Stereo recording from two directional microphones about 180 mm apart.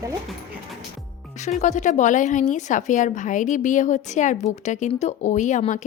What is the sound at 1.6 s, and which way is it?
A woman's voice, 40° left (ahead or behind).